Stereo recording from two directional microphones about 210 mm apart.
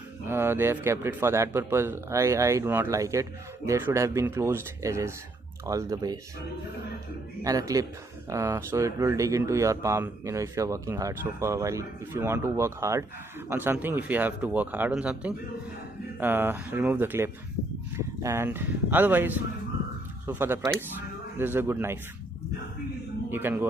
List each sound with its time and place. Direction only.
0.3 s speech: 10° right (ahead or behind)
7.4 s speech: 15° right (ahead or behind)
23.3 s speech: 10° right (ahead or behind)